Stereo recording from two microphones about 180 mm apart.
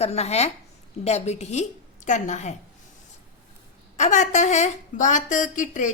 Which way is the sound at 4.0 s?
40° left (ahead or behind).